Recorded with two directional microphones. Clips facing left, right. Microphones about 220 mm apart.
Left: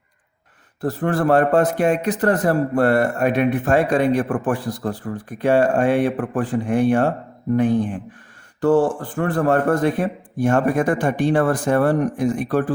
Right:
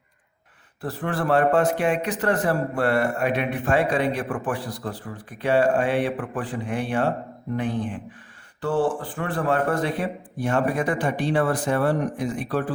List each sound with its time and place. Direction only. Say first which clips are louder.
0.8 s a man's voice: left 7 dB; 45° left (ahead or behind)